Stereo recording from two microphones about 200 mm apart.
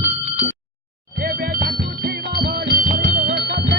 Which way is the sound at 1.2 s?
45° right (ahead or behind).